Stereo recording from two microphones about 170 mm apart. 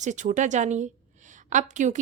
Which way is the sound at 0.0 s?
45° right (ahead or behind).